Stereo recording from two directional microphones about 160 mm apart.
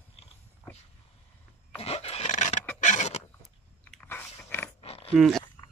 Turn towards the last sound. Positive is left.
turn(degrees=0)  # may be behind; listen again after turning